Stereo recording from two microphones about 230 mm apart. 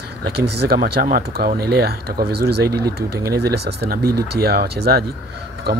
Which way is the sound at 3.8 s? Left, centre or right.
Right.